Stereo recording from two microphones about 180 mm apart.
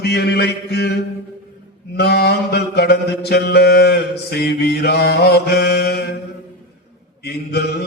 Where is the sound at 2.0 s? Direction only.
65° left (ahead or behind).